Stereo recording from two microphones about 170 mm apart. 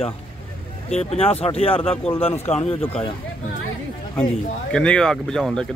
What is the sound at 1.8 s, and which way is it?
Speech, 10° left (ahead or behind).